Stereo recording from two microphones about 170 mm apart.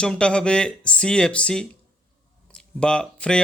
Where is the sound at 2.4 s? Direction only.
5° left (ahead or behind).